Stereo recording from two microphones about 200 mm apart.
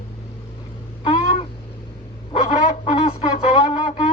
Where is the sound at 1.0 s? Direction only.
25° left (ahead or behind).